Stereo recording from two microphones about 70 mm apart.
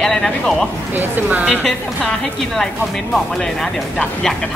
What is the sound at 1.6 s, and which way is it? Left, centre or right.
Speech, centre.